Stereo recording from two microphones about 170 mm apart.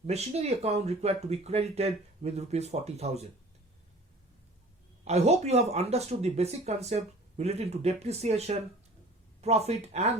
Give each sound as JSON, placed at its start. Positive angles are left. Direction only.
{"t": 0.1, "sound": "speech", "side_deg": -40}
{"t": 5.0, "sound": "speech", "side_deg": -40}